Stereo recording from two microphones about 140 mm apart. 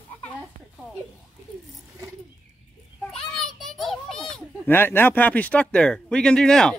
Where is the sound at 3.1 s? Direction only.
5° left (ahead or behind).